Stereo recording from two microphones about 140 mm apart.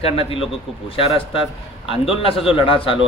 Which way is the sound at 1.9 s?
40° left (ahead or behind).